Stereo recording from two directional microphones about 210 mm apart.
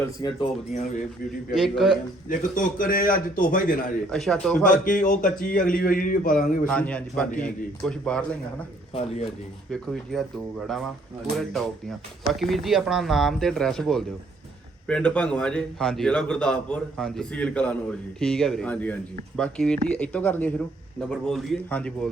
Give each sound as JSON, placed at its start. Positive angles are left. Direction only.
{"t": 0.0, "sound": "speech", "side_deg": 20}
{"t": 0.7, "sound": "a man's voice", "side_deg": 35}
{"t": 1.5, "sound": "a man's voice", "side_deg": 0}
{"t": 2.3, "sound": "a man's voice", "side_deg": 40}
{"t": 4.1, "sound": "a man's voice", "side_deg": 5}
{"t": 4.7, "sound": "a man's voice", "side_deg": 40}
{"t": 6.7, "sound": "a man's voice", "side_deg": 5}
{"t": 8.9, "sound": "speech", "side_deg": 30}
{"t": 9.8, "sound": "a man's voice", "side_deg": 0}
{"t": 11.3, "sound": "a man's voice", "side_deg": 0}